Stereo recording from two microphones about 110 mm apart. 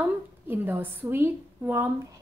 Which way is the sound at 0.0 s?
20° right (ahead or behind).